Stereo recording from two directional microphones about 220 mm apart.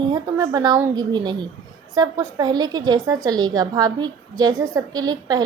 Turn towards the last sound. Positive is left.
turn(degrees=-15)  # may be behind; listen again after turning